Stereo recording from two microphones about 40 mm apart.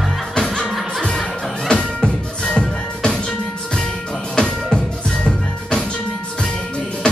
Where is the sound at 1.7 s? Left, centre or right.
Left.